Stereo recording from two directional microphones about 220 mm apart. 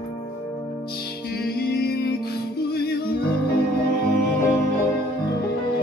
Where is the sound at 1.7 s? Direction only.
45° left (ahead or behind).